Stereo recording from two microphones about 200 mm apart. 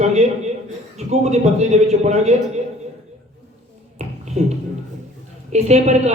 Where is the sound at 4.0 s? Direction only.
35° right (ahead or behind).